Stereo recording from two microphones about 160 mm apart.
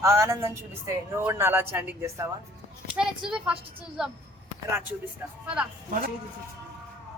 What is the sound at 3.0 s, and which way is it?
Speech, 5° right (ahead or behind).